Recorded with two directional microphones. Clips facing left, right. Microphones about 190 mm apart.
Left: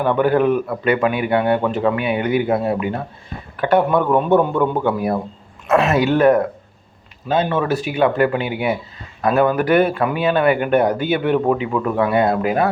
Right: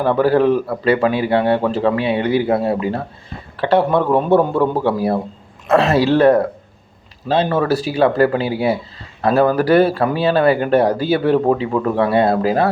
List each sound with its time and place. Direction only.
0.0 s speech: 35° right (ahead or behind)